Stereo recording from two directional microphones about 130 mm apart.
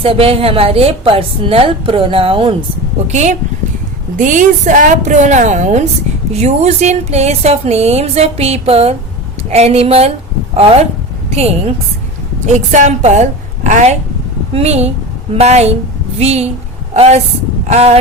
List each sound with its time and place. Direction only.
0.0 s a woman's voice: 45° right (ahead or behind)
3.1 s speech: 65° right (ahead or behind)
4.2 s a woman's voice: 80° right; by 10.1 s 50° right (ahead or behind)
11.3 s a woman's voice: 55° right (ahead or behind)
12.5 s speech: 70° right (ahead or behind)
14.5 s a woman's voice: 55° right (ahead or behind)